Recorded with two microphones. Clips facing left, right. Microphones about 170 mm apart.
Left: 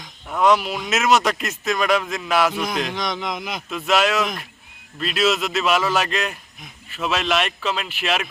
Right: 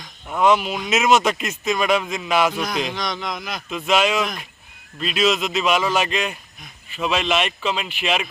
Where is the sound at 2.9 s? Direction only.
20° left (ahead or behind).